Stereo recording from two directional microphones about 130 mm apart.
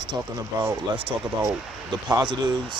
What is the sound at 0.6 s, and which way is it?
Speech, 40° right (ahead or behind).